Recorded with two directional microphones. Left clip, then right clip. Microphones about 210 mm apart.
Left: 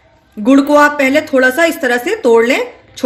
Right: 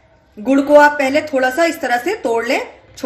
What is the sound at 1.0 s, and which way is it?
A woman's voice, 50° left (ahead or behind).